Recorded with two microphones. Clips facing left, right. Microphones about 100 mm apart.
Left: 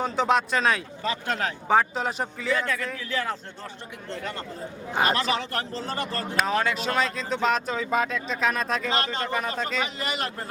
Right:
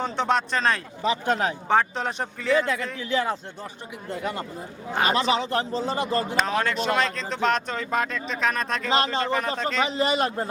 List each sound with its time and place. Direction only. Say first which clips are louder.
0.0 s speech: left 1 dB; 5° left (ahead or behind)
1.0 s a man's voice: right 5 dB; 15° right (ahead or behind)
1.6 s speech: left 2 dB; 5° left (ahead or behind)
2.6 s a man's voice: right 3 dB; 20° right (ahead or behind)
6.3 s speech: even; centre (ahead or behind)
9.8 s a man's voice: right 7 dB; 25° right (ahead or behind)